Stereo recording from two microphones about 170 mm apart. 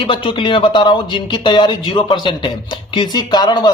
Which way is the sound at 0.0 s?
30° left (ahead or behind).